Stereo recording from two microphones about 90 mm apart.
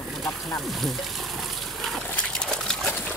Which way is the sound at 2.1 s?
10° left (ahead or behind).